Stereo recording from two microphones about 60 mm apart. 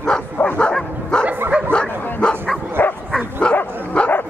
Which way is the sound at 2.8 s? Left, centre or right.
Left.